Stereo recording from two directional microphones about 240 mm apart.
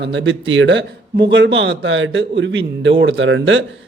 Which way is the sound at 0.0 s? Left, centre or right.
Right.